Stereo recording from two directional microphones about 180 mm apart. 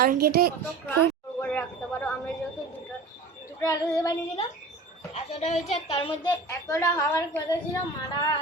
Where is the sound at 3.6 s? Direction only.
20° left (ahead or behind).